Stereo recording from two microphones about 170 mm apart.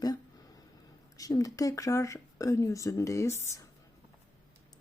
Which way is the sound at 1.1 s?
20° left (ahead or behind).